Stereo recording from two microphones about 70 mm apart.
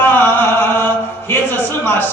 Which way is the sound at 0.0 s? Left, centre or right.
Left.